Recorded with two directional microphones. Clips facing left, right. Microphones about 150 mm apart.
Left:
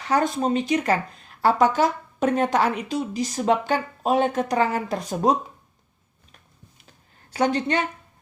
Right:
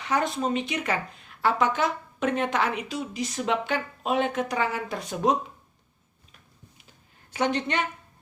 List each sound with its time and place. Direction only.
0.0 s a woman's voice: 35° left (ahead or behind)
7.3 s a woman's voice: 40° left (ahead or behind)